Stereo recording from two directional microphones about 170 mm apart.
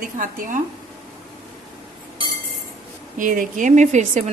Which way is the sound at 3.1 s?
50° right (ahead or behind).